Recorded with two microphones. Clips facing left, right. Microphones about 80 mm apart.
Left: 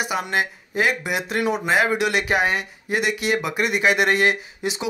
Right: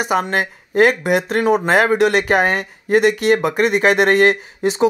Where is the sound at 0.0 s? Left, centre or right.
Right.